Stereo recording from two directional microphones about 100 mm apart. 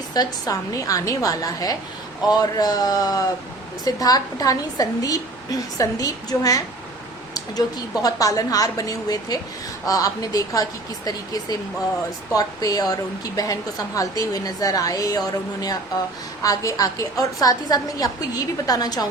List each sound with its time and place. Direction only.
0.1 s a woman's voice: 40° left (ahead or behind)
16.4 s a woman's voice: 35° left (ahead or behind)